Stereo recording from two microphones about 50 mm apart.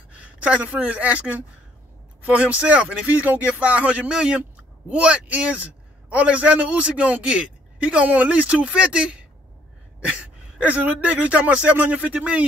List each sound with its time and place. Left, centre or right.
0.4 s a man's voice: right
3.1 s a man's voice: right
10.7 s a man's voice: right